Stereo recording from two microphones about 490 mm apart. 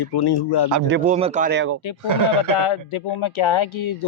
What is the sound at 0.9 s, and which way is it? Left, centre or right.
Speech, centre.